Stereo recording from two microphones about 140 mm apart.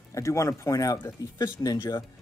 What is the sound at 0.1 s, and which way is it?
Speech, 20° left (ahead or behind).